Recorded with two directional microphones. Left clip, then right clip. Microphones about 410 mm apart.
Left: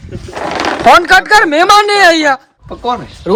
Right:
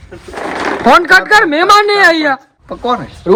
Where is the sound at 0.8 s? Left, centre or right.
Centre.